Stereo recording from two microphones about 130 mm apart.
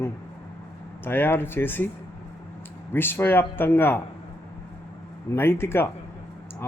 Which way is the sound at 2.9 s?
15° left (ahead or behind).